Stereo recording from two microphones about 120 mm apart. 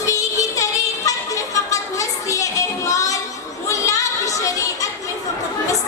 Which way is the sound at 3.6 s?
25° left (ahead or behind).